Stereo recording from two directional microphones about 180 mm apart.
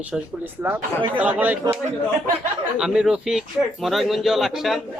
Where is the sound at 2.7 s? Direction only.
5° right (ahead or behind).